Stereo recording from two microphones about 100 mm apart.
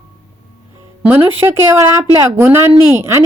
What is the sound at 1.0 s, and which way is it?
Speech, 20° right (ahead or behind).